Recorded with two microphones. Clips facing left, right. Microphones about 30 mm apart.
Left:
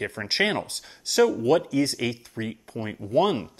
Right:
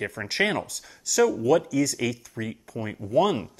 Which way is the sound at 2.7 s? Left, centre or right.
Centre.